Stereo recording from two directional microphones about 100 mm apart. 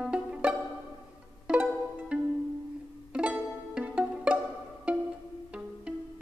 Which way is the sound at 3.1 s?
10° right (ahead or behind).